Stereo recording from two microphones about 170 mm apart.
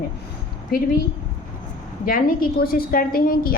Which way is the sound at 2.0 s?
55° left (ahead or behind).